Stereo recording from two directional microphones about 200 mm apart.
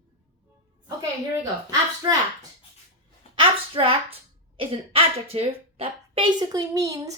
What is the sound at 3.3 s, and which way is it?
A woman's voice, 30° right (ahead or behind).